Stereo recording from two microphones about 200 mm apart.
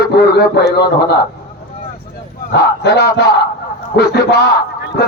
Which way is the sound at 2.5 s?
55° left (ahead or behind).